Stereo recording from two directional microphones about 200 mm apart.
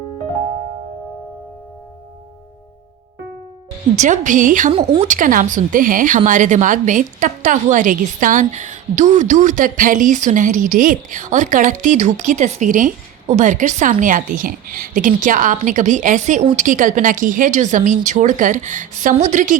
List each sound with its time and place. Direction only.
3.9 s speech: 40° right (ahead or behind)